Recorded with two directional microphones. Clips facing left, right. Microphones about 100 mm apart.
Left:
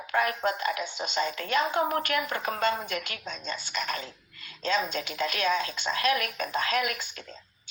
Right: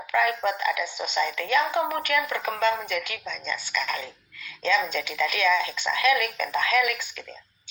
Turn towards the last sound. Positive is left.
turn(degrees=40)  # may be behind; listen again after turning